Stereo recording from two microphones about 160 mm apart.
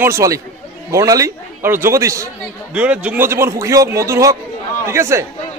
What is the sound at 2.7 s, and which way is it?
A man's voice, 10° right (ahead or behind).